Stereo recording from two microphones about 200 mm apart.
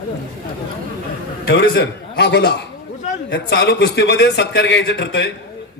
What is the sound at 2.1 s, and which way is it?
A man's voice, 60° left (ahead or behind).